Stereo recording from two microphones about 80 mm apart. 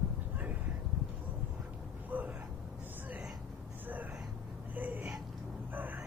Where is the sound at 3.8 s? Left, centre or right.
Right.